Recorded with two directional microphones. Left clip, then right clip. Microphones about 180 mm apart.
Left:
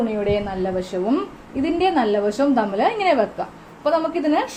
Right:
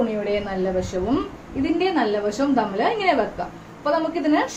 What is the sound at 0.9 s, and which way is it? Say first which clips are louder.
A woman's voice: left 2 dB; 45° left (ahead or behind).